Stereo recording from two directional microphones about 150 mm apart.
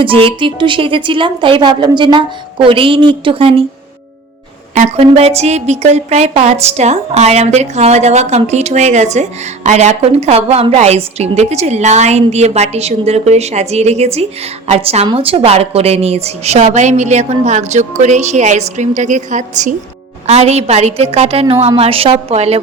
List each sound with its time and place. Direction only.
0.0 s a woman's voice: 35° right (ahead or behind)
4.7 s a woman's voice: 50° right (ahead or behind)